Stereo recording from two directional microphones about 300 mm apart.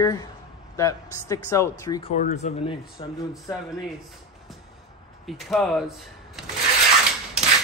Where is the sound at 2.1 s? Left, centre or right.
Left.